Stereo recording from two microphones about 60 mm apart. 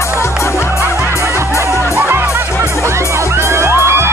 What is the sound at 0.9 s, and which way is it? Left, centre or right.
Music, right.